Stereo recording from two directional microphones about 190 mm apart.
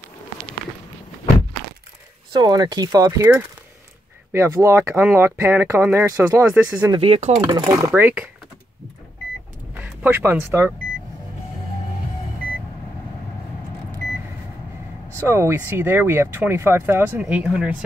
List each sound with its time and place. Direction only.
2.3 s speech: 20° right (ahead or behind); by 6.9 s 5° right (ahead or behind)
6.9 s speech: 30° right (ahead or behind)
7.5 s speech: 20° right (ahead or behind)
9.8 s speech: 10° right (ahead or behind)
15.1 s speech: 15° right (ahead or behind)